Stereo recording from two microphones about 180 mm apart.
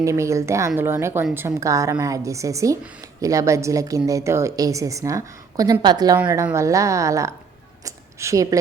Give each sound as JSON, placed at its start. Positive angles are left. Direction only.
{"t": 0.0, "sound": "a woman's voice", "side_deg": -15}